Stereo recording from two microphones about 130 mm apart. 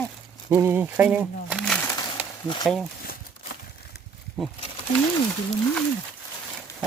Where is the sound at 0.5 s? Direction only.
20° right (ahead or behind).